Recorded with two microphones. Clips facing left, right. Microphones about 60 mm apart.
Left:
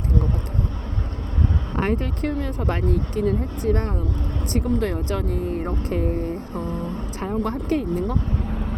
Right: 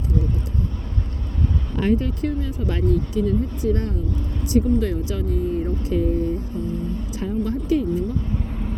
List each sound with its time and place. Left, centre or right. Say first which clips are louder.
1.7 s speech: right 4 dB; left